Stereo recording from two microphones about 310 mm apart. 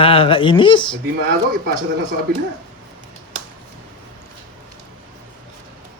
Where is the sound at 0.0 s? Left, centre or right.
Centre.